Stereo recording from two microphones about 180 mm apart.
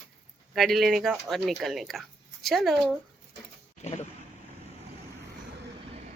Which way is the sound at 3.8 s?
40° left (ahead or behind).